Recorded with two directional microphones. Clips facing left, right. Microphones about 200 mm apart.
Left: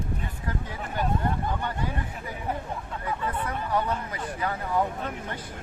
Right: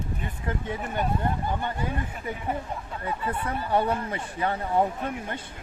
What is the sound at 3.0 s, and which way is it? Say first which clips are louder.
Speech: right 1 dB; 30° right (ahead or behind).